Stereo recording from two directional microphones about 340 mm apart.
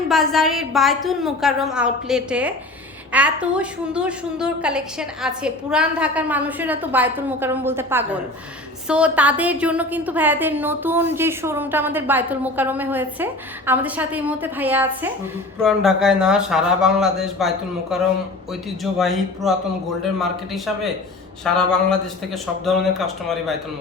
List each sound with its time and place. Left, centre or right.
0.1 s a woman's voice: centre
18.8 s a woman's voice: centre